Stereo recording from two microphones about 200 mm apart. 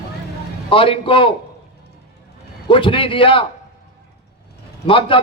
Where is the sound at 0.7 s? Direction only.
25° left (ahead or behind).